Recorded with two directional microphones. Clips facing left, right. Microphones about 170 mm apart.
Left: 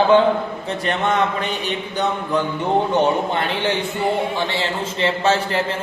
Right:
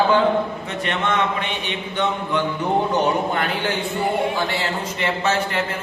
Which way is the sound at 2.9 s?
25° left (ahead or behind).